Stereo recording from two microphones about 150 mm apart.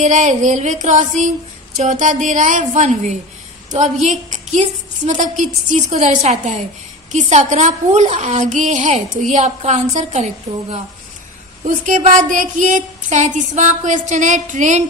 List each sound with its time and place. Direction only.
0.0 s a woman's voice: 55° right (ahead or behind)